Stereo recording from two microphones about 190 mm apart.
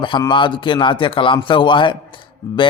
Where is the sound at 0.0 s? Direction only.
25° left (ahead or behind).